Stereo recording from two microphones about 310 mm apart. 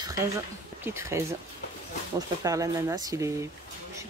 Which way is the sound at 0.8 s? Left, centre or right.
Centre.